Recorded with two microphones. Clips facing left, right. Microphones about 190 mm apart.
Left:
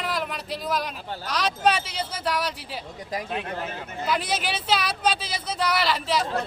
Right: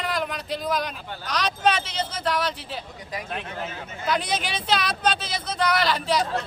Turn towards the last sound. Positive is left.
turn(degrees=5)  # may be behind; listen again after turning